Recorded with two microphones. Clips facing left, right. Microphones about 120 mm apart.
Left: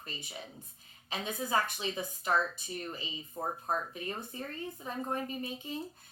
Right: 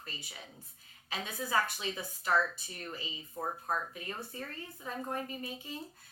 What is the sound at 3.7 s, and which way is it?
A woman's voice, 25° left (ahead or behind).